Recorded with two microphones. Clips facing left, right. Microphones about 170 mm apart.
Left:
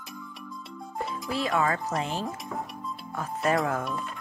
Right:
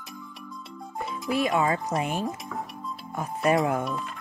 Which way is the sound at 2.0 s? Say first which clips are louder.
Right 2 dB; 15° right (ahead or behind).